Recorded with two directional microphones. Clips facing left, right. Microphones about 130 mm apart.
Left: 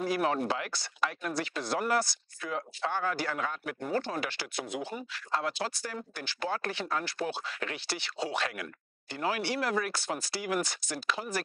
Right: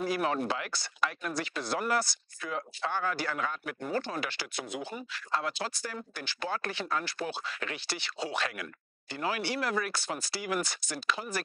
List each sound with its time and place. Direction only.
0.0 s speech: 40° left (ahead or behind)
1.0 s speech: 30° left (ahead or behind)
1.4 s speech: 50° left (ahead or behind)
2.0 s speech: 35° left (ahead or behind)
4.1 s speech: 50° left (ahead or behind)
6.1 s speech: 55° left (ahead or behind)
6.9 s speech: 35° left (ahead or behind)
7.2 s speech: 50° left (ahead or behind)